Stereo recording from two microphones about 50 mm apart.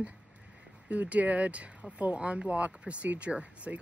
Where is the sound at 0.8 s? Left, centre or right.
Right.